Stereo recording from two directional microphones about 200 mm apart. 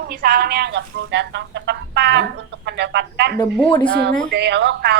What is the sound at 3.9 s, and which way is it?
A woman's voice, 55° right (ahead or behind).